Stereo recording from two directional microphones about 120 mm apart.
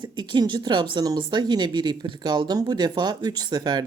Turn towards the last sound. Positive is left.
turn(degrees=-35)  # may be behind; listen again after turning